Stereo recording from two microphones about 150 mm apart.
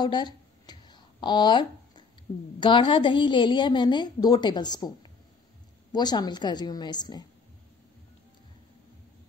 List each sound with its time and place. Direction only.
0.0 s a sound: 30° left (ahead or behind)
2.3 s a woman's voice: 35° left (ahead or behind)
5.9 s a woman's voice: 30° left (ahead or behind)